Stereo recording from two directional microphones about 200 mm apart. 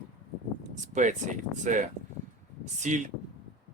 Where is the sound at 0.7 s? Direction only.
40° right (ahead or behind).